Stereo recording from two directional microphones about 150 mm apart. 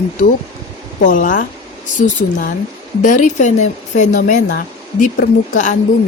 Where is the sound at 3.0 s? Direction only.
55° left (ahead or behind).